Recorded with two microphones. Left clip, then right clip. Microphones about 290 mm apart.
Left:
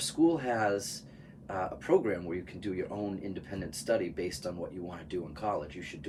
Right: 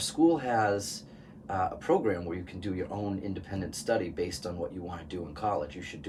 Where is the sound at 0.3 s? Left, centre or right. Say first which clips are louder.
Right 5 dB; centre.